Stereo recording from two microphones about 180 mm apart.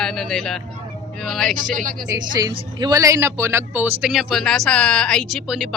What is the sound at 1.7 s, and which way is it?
Speech, 45° right (ahead or behind).